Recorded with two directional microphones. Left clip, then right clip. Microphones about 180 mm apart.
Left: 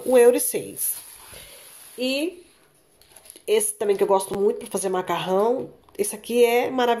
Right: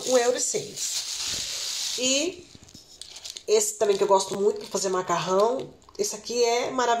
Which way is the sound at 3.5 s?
25° left (ahead or behind).